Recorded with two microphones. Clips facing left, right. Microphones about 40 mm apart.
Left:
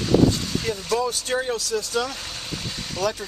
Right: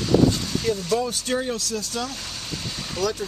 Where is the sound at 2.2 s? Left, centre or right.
Centre.